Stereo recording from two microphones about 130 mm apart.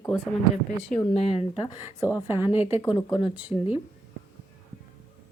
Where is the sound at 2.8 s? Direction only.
35° left (ahead or behind).